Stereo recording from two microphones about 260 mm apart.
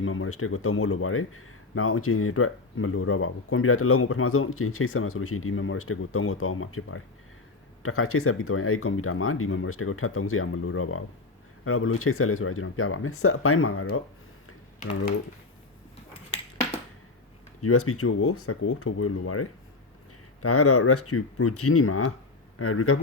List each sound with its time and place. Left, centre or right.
0.0 s speech: left
17.6 s speech: left